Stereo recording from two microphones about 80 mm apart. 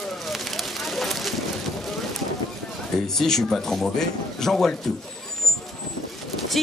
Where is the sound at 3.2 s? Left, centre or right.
Centre.